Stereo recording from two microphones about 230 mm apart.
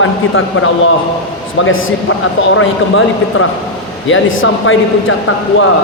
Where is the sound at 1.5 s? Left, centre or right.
Left.